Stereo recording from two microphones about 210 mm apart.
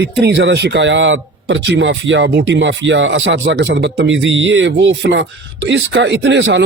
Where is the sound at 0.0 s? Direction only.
55° right (ahead or behind).